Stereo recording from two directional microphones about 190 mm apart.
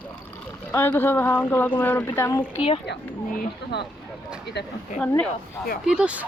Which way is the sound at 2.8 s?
55° left (ahead or behind).